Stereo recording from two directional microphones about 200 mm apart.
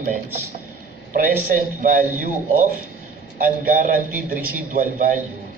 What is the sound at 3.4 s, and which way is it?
A man's voice, 45° right (ahead or behind).